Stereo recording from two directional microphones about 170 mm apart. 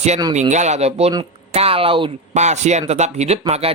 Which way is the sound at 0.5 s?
40° right (ahead or behind).